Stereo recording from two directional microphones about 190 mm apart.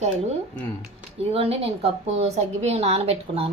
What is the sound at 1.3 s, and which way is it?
A woman's voice, 30° right (ahead or behind).